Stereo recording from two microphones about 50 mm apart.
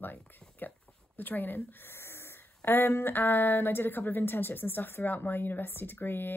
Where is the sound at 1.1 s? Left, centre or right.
Left.